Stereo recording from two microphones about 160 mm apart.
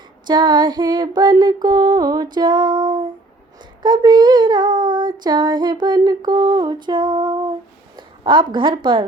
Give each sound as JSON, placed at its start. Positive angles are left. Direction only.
{"t": 0.3, "sound": "female singing", "side_deg": -30}
{"t": 7.9, "sound": "a woman's voice", "side_deg": -30}